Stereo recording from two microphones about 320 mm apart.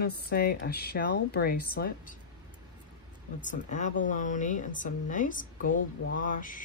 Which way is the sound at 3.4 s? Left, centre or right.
Left.